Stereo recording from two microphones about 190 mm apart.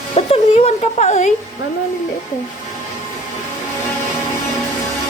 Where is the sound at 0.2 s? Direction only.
35° left (ahead or behind).